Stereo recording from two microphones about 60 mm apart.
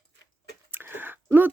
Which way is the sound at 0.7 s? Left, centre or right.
Right.